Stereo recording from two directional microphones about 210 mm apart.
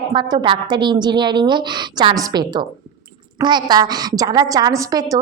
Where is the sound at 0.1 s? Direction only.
20° right (ahead or behind).